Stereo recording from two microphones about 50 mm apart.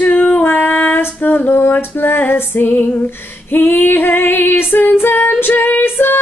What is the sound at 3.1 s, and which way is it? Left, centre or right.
Female singing, left.